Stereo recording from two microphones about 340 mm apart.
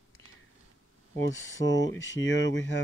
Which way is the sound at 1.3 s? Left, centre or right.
Left.